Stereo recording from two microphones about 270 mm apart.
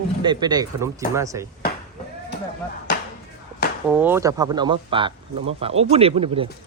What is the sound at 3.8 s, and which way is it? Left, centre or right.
Speech, centre.